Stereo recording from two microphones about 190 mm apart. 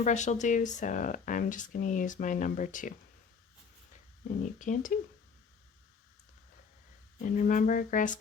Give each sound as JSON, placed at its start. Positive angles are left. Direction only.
{"t": 0.0, "sound": "speech", "side_deg": 40}
{"t": 4.2, "sound": "speech", "side_deg": 40}
{"t": 7.2, "sound": "speech", "side_deg": 45}